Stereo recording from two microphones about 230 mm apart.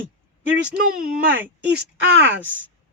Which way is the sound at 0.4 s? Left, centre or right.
Right.